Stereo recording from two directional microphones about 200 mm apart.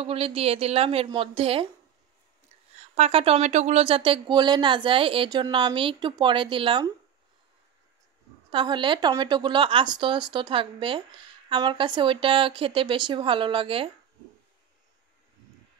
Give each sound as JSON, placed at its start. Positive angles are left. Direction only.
{"t": 0.0, "sound": "speech", "side_deg": -30}
{"t": 3.0, "sound": "speech", "side_deg": -30}
{"t": 8.5, "sound": "speech", "side_deg": -25}